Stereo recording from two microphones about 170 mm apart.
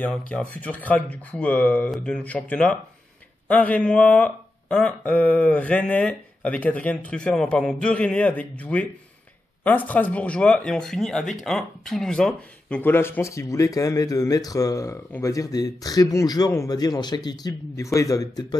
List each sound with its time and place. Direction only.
0.0 s speech: 5° left (ahead or behind)